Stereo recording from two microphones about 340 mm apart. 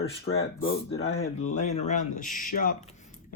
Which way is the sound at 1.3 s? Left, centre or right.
Left.